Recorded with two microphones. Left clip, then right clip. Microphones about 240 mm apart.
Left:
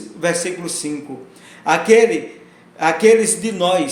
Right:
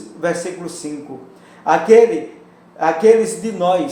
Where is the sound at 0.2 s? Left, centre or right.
Left.